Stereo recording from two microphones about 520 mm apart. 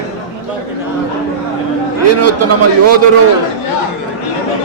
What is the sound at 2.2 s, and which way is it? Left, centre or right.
Speech, right.